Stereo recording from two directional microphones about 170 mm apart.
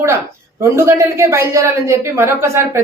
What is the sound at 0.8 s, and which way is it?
A woman's voice, 15° right (ahead or behind).